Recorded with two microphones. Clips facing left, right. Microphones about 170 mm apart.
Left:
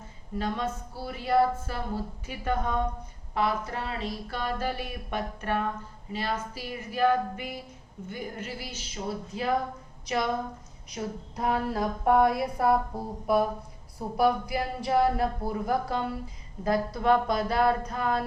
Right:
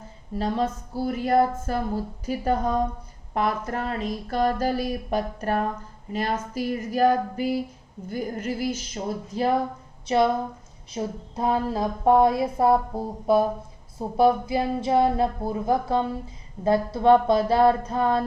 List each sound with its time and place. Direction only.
0.3 s a woman's voice: 35° right (ahead or behind)
3.3 s speech: 45° right (ahead or behind)
10.9 s a woman's voice: 25° right (ahead or behind)